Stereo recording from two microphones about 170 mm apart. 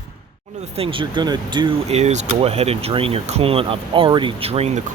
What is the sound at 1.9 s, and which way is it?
Speech, 40° right (ahead or behind).